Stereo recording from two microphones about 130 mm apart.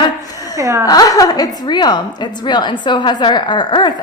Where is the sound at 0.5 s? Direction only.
25° right (ahead or behind).